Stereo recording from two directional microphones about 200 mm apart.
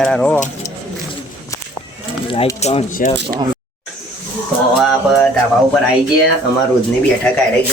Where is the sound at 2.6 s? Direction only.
35° left (ahead or behind).